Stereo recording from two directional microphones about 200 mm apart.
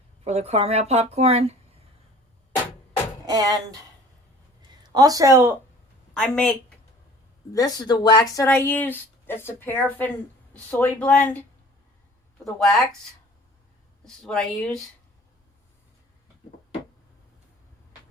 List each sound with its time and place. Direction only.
0.3 s a woman's voice: 30° right (ahead or behind)
3.2 s speech: 20° right (ahead or behind)
4.9 s a woman's voice: 20° right (ahead or behind)
6.1 s speech: 5° left (ahead or behind)
7.5 s speech: 20° left (ahead or behind)
12.5 s speech: centre (ahead or behind)
14.0 s speech: 5° left (ahead or behind)